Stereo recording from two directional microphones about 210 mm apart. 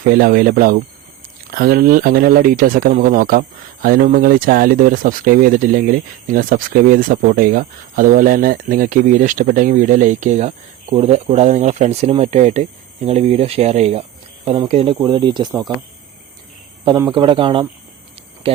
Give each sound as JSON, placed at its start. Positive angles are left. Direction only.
{"t": 0.1, "sound": "speech", "side_deg": -45}
{"t": 16.8, "sound": "speech", "side_deg": -15}
{"t": 17.1, "sound": "speech", "side_deg": -25}